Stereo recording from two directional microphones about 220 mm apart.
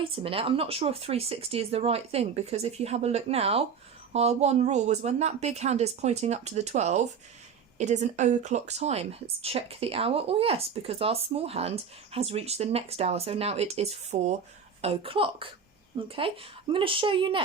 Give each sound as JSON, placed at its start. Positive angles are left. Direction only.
{"t": 0.2, "sound": "a woman's voice", "side_deg": -25}